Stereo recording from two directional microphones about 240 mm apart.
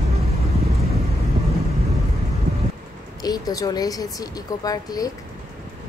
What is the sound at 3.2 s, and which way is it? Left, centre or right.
A woman's voice, centre.